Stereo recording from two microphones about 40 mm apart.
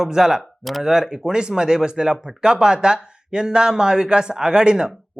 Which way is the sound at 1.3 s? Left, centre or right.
Right.